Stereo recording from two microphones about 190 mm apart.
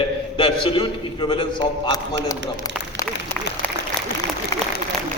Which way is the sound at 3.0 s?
10° left (ahead or behind).